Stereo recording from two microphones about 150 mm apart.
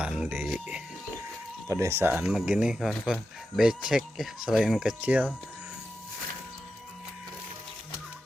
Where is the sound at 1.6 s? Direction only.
20° right (ahead or behind).